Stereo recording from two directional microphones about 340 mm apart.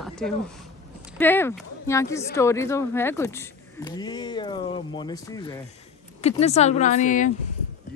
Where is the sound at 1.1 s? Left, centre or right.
Centre.